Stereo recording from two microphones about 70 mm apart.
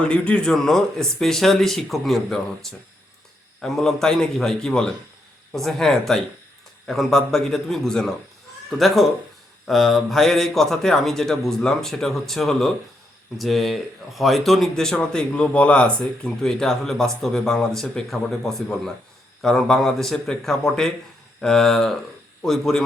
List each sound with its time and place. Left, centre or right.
0.1 s a man's voice: centre
9.6 s a man's voice: centre